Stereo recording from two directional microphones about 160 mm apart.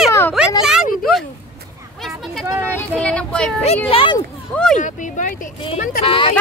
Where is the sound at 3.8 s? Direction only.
35° left (ahead or behind).